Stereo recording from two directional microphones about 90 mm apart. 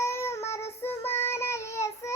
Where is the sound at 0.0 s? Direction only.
30° left (ahead or behind).